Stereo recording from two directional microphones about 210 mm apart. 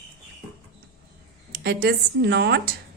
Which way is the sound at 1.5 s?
45° right (ahead or behind).